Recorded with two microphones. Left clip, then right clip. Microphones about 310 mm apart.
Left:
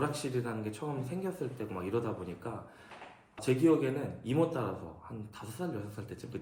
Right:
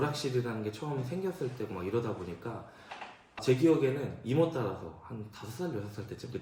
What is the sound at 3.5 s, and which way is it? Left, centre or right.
Speech, centre.